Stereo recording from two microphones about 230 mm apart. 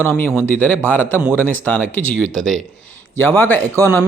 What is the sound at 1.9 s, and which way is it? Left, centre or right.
Speech, right.